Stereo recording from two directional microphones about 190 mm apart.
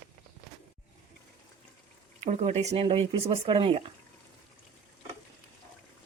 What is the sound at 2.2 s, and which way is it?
Speech, 35° right (ahead or behind).